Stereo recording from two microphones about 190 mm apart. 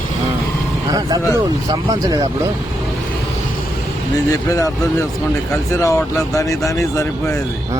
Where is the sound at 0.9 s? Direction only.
20° right (ahead or behind).